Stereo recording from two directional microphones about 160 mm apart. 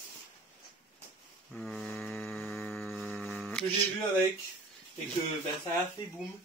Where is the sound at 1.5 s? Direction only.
Centre (ahead or behind).